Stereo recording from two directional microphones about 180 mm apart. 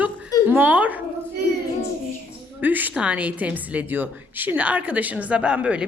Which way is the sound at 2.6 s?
10° right (ahead or behind).